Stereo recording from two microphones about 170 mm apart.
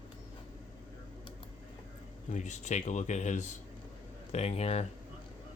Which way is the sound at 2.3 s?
45° left (ahead or behind).